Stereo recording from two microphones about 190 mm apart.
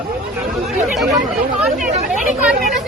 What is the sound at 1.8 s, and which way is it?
Speech, 40° right (ahead or behind).